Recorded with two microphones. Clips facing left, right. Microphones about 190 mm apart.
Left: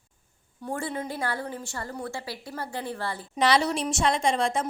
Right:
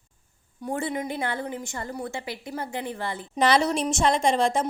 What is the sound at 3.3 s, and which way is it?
Speech, 45° right (ahead or behind).